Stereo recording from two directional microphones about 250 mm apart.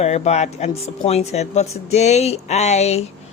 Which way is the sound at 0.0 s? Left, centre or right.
Left.